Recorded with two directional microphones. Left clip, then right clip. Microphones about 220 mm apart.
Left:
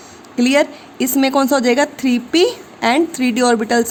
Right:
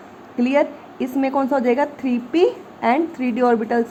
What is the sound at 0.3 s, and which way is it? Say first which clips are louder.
A woman's voice: left 4 dB; 45° left (ahead or behind).